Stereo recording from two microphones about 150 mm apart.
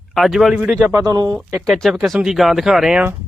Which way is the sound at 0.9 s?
25° right (ahead or behind).